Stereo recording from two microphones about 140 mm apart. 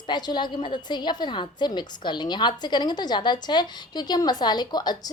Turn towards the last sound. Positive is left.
turn(degrees=30)  # may be behind; listen again after turning